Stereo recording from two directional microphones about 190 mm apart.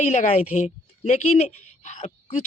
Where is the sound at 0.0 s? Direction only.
40° left (ahead or behind).